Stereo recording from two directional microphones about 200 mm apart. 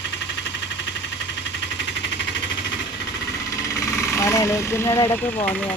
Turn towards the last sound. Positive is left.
turn(degrees=15)  # may be behind; listen again after turning